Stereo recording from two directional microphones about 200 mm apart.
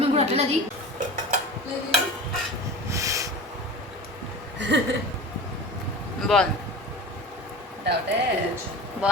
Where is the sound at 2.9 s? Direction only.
15° right (ahead or behind).